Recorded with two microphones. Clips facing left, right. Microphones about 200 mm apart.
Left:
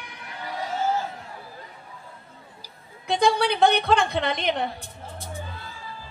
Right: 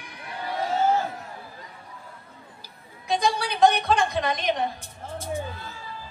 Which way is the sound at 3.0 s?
60° left (ahead or behind).